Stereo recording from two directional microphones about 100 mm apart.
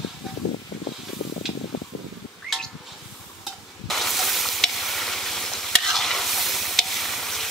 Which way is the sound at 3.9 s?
Centre (ahead or behind).